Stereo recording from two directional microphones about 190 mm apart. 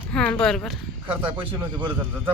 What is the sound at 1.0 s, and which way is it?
Speech, 25° right (ahead or behind).